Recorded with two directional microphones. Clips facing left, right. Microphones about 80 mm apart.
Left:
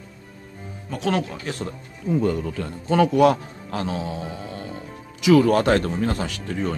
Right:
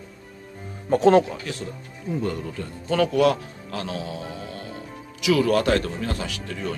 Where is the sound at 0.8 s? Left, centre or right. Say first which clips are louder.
Right 8 dB; right.